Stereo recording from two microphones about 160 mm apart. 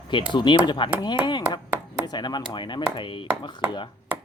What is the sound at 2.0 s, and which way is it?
Speech, 25° left (ahead or behind).